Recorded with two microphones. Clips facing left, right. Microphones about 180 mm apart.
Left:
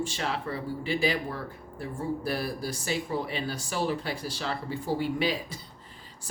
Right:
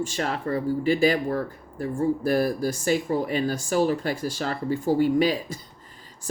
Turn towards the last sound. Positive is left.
turn(degrees=-45)  # may be behind; listen again after turning